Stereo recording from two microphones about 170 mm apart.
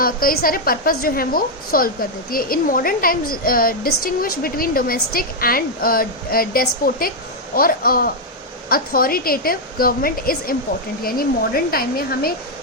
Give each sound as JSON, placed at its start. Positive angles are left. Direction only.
{"t": 0.0, "sound": "a woman's voice", "side_deg": 60}